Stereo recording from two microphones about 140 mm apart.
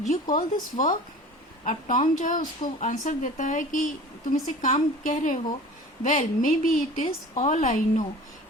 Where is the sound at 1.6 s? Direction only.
65° left (ahead or behind).